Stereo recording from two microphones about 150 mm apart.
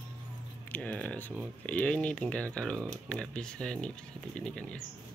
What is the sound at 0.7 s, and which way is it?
Speech, 10° left (ahead or behind).